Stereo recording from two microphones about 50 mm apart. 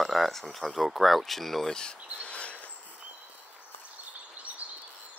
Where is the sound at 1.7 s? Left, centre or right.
Left.